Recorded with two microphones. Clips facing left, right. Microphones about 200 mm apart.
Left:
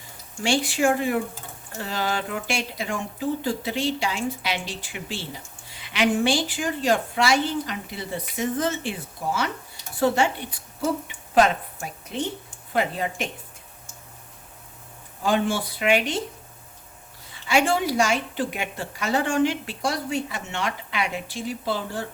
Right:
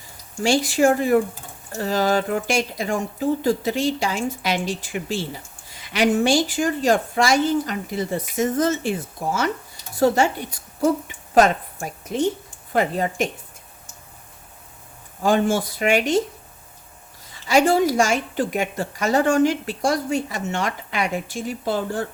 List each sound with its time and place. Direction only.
0.4 s a woman's voice: 40° right (ahead or behind)
15.2 s a woman's voice: 45° right (ahead or behind)
17.3 s a woman's voice: 40° right (ahead or behind)